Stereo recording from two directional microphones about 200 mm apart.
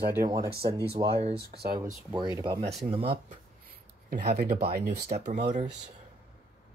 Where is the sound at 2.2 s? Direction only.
20° right (ahead or behind).